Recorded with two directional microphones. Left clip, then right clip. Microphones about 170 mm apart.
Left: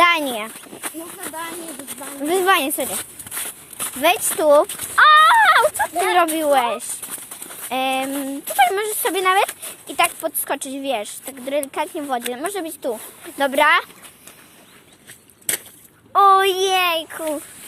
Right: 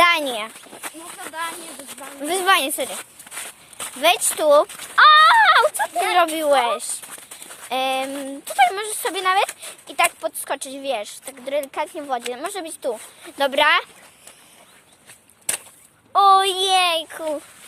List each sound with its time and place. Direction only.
0.0 s a sound: 10° right (ahead or behind)
0.8 s speech: 35° left (ahead or behind)
2.2 s speech: 10° right (ahead or behind)
2.9 s a sound: 40° left (ahead or behind)
4.4 s speech: 5° right (ahead or behind)
4.7 s speech: 45° left (ahead or behind)
4.9 s speech: centre (ahead or behind); by 6.8 s 15° right (ahead or behind)
7.7 s speech: centre (ahead or behind)
16.1 s speech: 5° right (ahead or behind)